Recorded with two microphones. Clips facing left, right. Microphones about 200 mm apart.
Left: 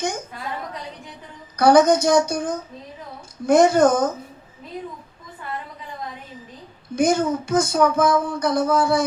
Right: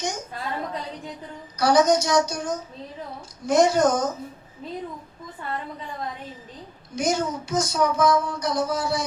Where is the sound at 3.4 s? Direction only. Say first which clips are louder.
Left 4 dB; 55° left (ahead or behind).